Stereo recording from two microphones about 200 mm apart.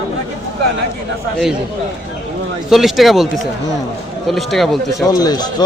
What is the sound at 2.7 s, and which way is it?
Speech, centre (ahead or behind).